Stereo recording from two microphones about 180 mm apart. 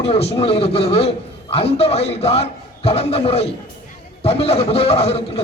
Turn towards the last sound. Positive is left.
turn(degrees=35)  # may be behind; listen again after turning